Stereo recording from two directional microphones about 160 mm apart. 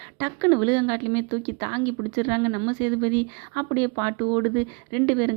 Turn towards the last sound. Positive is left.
turn(degrees=-25)  # may be behind; listen again after turning